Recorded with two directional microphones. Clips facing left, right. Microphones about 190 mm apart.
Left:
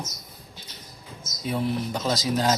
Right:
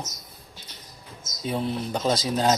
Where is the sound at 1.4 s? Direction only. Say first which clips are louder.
Left 1 dB; 25° right (ahead or behind).